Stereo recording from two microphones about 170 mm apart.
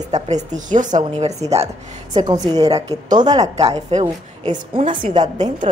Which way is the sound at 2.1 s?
30° right (ahead or behind).